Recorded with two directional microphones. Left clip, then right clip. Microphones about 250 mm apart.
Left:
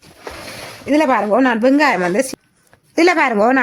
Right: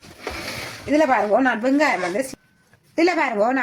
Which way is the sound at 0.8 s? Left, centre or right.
Left.